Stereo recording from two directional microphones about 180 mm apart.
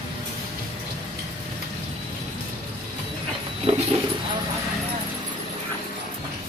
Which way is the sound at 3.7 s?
40° right (ahead or behind).